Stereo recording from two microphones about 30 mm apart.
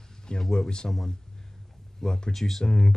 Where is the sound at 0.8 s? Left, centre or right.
Centre.